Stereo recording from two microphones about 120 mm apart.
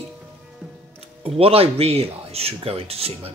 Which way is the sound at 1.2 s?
55° right (ahead or behind).